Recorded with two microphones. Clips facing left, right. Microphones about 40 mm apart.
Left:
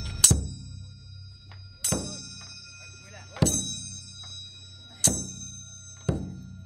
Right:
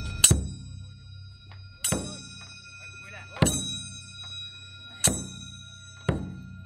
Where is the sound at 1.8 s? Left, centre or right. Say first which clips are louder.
Even; right.